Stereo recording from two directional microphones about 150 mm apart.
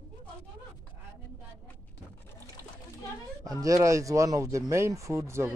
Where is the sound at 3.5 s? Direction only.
25° right (ahead or behind).